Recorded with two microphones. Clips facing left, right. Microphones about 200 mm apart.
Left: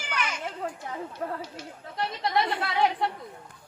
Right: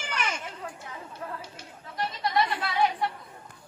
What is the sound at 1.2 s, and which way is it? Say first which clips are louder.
Speech: left 5 dB; 55° left (ahead or behind).